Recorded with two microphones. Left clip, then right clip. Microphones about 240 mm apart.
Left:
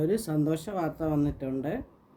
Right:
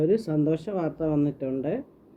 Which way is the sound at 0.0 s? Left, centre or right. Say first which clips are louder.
Right 4 dB; centre.